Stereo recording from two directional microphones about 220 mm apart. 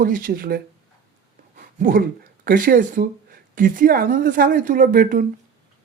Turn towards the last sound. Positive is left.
turn(degrees=-40)  # may be behind; listen again after turning